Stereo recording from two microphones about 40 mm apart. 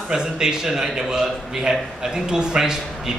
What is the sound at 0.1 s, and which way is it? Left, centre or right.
Speech, centre.